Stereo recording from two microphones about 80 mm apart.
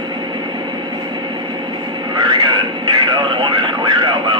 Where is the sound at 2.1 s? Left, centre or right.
Right.